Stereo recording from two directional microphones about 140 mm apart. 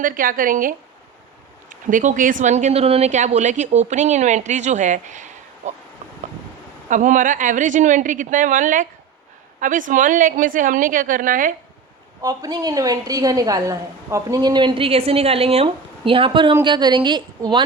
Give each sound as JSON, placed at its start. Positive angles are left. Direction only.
{"t": 0.0, "sound": "speech", "side_deg": -85}
{"t": 6.9, "sound": "a woman's voice", "side_deg": -65}
{"t": 12.2, "sound": "a woman's voice", "side_deg": -30}